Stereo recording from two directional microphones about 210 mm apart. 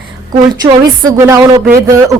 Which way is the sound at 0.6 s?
10° right (ahead or behind).